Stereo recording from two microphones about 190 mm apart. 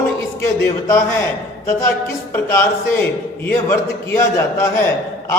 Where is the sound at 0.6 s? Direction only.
15° left (ahead or behind).